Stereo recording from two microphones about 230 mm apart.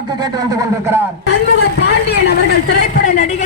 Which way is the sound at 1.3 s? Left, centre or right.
Left.